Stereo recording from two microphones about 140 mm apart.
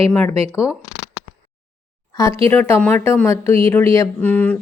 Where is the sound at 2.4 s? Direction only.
15° left (ahead or behind).